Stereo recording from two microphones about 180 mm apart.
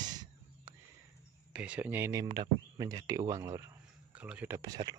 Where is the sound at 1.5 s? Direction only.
5° right (ahead or behind); by 5.0 s 20° right (ahead or behind).